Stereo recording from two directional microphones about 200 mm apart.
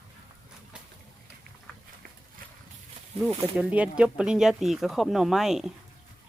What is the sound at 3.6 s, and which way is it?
Speech, 5° right (ahead or behind).